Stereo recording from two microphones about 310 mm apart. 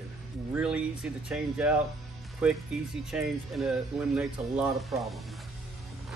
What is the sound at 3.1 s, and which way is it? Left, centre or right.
Speech, centre.